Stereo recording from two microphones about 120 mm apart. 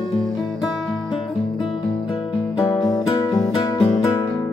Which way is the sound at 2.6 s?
30° left (ahead or behind).